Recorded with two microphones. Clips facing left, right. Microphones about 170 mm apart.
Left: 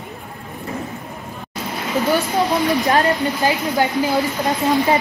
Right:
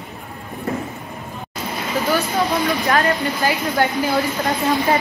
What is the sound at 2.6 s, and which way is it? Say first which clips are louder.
Speech: left 2 dB; 20° left (ahead or behind).